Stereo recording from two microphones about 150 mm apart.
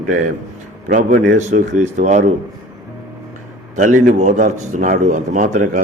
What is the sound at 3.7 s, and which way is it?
A man's voice, 55° right (ahead or behind).